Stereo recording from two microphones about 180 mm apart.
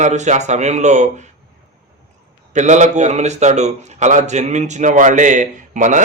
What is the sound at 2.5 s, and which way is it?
Speech, 40° right (ahead or behind).